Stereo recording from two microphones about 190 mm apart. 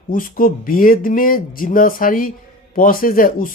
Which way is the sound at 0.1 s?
45° left (ahead or behind).